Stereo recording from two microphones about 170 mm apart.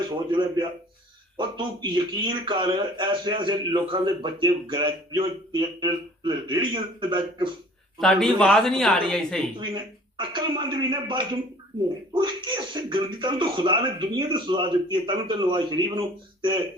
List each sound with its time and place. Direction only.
0.3 s speech: 25° right (ahead or behind)
7.9 s speech: centre (ahead or behind)
9.6 s speech: 25° right (ahead or behind)